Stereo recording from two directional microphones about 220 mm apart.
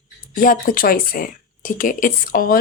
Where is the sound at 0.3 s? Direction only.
40° left (ahead or behind).